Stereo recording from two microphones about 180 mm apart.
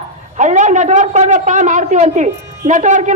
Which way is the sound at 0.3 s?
40° right (ahead or behind).